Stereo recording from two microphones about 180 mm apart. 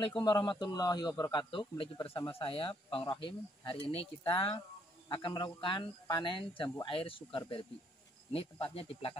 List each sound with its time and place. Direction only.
0.0 s a man's voice: 25° left (ahead or behind)